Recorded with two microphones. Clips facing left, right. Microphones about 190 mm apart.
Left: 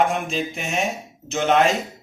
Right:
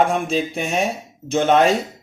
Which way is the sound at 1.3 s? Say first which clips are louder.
Right 3 dB; 35° right (ahead or behind).